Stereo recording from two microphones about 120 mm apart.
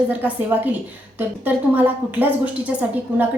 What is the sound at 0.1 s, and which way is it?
A woman's voice, 15° right (ahead or behind).